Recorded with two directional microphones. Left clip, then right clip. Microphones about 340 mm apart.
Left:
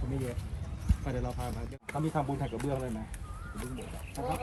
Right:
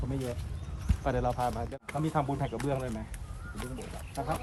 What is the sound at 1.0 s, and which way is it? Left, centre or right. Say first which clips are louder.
Speech: right 8 dB; right.